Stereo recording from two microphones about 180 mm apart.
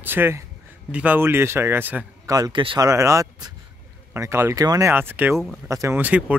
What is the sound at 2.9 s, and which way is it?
Speech, 15° right (ahead or behind).